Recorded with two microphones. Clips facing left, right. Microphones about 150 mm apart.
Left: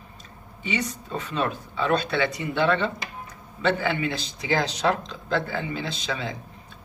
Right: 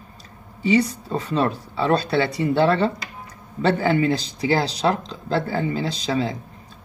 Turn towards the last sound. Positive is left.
turn(degrees=-35)  # may be behind; listen again after turning